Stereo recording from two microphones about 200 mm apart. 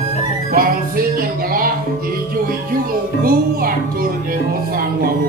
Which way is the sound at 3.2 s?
45° right (ahead or behind).